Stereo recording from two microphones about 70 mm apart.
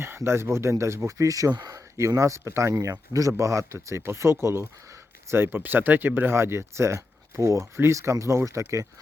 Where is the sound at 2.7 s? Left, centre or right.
Right.